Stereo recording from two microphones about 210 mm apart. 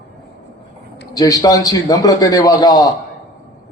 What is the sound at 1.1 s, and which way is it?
A man's voice, 15° left (ahead or behind).